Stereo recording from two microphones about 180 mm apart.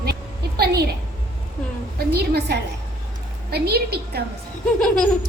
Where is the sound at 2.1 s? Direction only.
65° right (ahead or behind).